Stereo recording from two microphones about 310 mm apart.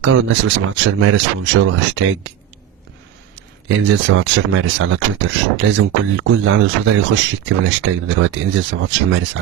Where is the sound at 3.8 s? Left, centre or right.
Right.